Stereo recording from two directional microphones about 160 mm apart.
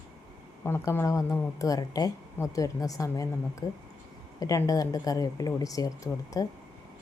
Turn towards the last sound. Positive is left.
turn(degrees=20)  # may be behind; listen again after turning